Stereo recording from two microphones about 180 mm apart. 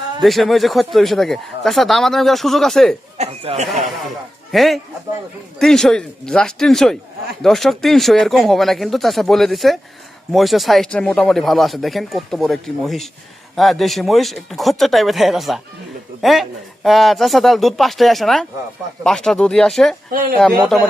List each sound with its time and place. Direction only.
0.2 s speech: centre (ahead or behind)
3.2 s speech: 35° right (ahead or behind)
4.5 s speech: centre (ahead or behind)
20.1 s speech: 55° right (ahead or behind)
20.7 s speech: centre (ahead or behind)